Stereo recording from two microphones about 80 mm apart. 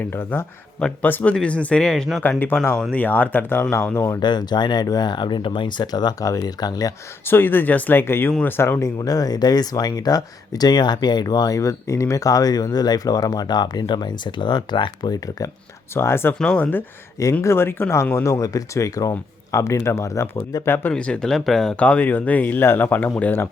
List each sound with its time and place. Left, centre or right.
0.0 s speech: left; by 2.0 s centre
2.9 s speech: left
4.2 s speech: left
7.3 s speech: left
9.0 s speech: left
16.0 s speech: left
17.4 s speech: left
20.9 s speech: centre